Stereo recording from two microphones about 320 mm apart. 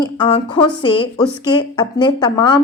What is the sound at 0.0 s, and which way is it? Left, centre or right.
Speech, centre.